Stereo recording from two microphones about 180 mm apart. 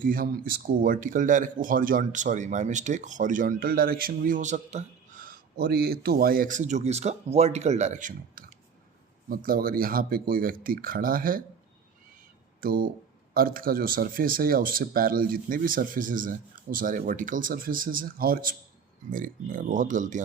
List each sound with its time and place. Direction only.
0.0 s speech: 50° right (ahead or behind)
12.5 s a sound: 55° right (ahead or behind)
13.3 s speech: 55° right (ahead or behind)